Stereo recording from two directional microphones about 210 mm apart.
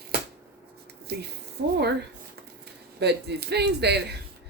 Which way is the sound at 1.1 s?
50° right (ahead or behind).